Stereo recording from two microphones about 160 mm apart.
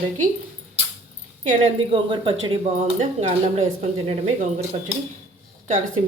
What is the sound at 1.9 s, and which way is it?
Speech, 35° right (ahead or behind).